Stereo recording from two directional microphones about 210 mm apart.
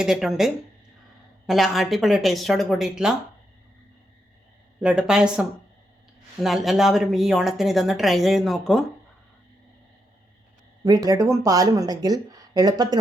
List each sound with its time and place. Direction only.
0.0 s speech: centre (ahead or behind)
4.8 s speech: 5° right (ahead or behind)
10.8 s speech: 15° right (ahead or behind)